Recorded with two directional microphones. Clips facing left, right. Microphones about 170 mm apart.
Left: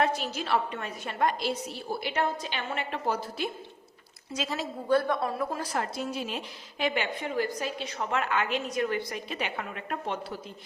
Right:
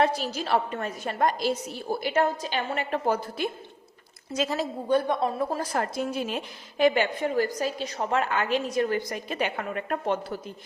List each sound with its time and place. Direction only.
0.0 s a woman's voice: 35° right (ahead or behind)
4.9 s speech: 20° right (ahead or behind)
5.7 s a woman's voice: 50° right (ahead or behind)